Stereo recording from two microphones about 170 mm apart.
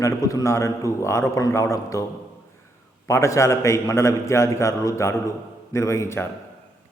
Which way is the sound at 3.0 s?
15° left (ahead or behind).